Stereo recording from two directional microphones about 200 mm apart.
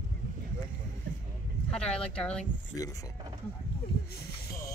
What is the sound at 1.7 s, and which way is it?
Speech, 5° left (ahead or behind).